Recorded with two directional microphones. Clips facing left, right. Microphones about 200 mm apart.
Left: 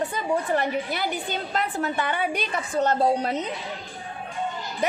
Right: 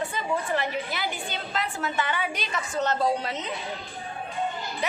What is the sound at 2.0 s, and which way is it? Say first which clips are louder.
Speech: even; 50° left (ahead or behind).